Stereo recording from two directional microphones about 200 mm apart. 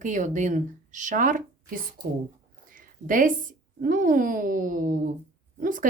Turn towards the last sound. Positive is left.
turn(degrees=-40)  # may be behind; listen again after turning